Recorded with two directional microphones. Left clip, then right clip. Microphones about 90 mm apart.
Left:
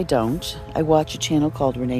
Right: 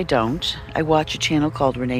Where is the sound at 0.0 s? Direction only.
45° left (ahead or behind).